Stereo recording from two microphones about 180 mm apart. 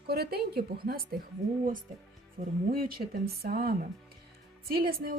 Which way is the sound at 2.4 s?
45° right (ahead or behind).